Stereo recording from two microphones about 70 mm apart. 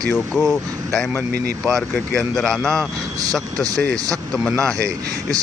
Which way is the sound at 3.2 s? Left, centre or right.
Right.